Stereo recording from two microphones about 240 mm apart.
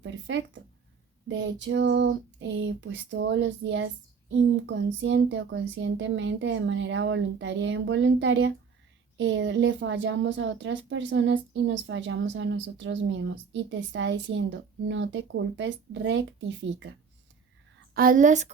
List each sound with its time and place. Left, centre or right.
0.0 s a woman's voice: right
17.9 s a woman's voice: right